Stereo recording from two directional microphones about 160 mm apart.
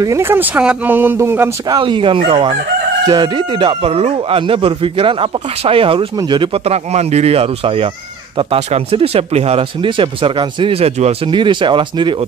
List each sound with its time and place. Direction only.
0.0 s speech: 15° right (ahead or behind)
1.8 s speech: 30° right (ahead or behind)